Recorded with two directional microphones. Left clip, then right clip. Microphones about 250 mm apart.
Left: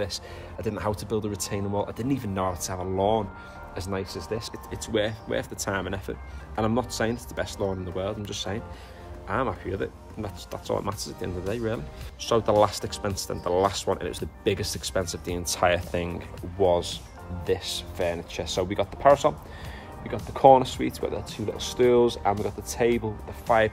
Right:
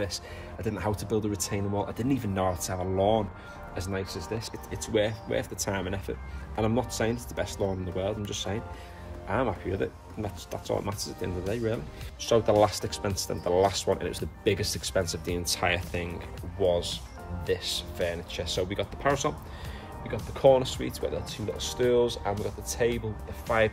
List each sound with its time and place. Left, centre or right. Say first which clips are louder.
0.0 s speech: left 2 dB; centre
20.3 s speech: left 5 dB; left
23.5 s speech: left 4 dB; centre